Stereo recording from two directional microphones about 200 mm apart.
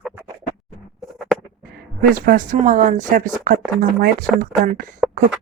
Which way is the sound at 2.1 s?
45° right (ahead or behind).